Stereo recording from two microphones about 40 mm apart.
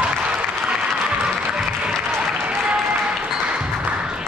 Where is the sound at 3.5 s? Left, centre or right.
Right.